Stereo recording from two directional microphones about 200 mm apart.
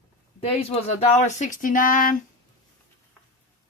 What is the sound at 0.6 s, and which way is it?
Speech, 35° left (ahead or behind).